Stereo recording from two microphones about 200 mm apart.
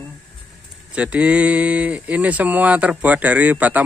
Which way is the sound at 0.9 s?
5° right (ahead or behind).